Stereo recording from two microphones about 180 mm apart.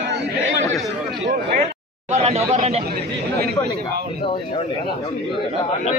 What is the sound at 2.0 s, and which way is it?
Speech, 35° right (ahead or behind).